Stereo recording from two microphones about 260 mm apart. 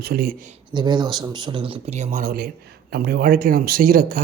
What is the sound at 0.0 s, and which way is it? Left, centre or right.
Speech, right.